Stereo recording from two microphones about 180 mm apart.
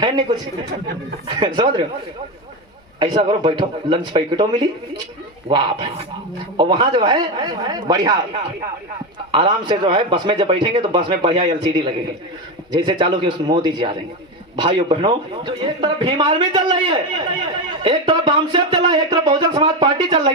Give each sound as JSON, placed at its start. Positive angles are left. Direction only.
{"t": 0.0, "sound": "speech", "side_deg": -25}
{"t": 1.4, "sound": "speech", "side_deg": -25}
{"t": 3.0, "sound": "speech", "side_deg": -25}